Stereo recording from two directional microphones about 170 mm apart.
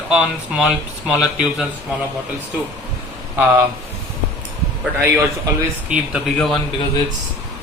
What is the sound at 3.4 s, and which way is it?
Speech, 10° right (ahead or behind).